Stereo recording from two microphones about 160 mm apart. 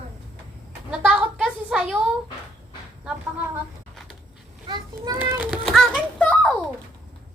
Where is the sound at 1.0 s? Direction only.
5° right (ahead or behind).